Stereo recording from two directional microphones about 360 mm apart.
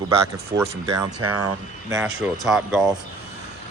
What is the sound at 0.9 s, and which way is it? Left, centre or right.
Speech, right.